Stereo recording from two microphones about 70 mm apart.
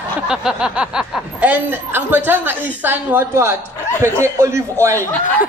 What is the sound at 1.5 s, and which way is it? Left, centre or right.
A woman's voice, right.